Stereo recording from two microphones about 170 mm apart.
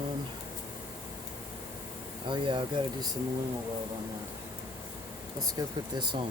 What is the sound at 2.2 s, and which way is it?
Speech, 30° right (ahead or behind).